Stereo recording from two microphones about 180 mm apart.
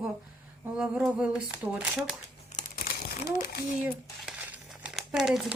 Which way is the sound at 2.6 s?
55° left (ahead or behind).